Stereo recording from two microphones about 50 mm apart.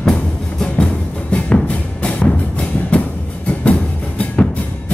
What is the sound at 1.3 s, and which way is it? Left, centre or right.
Music, left.